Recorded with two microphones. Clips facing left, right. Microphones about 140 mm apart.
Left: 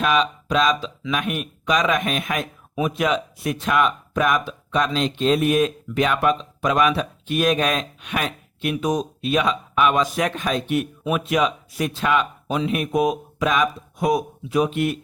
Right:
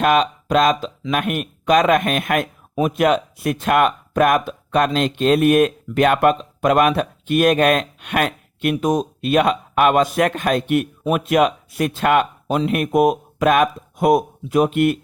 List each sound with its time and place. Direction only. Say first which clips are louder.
0.0 s speech: right 4 dB; 50° right (ahead or behind)